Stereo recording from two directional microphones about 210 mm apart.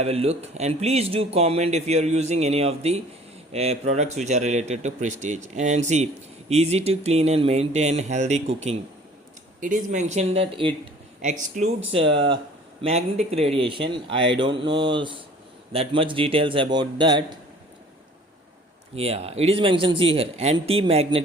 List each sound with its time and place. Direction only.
0.0 s speech: 30° right (ahead or behind)
11.2 s speech: 35° right (ahead or behind)
18.9 s speech: 30° right (ahead or behind)